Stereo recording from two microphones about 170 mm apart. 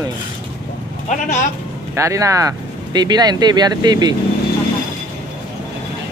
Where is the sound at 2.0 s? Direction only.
20° right (ahead or behind).